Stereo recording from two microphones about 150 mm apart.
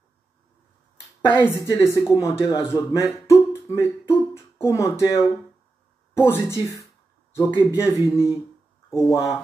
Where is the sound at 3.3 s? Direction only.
20° left (ahead or behind).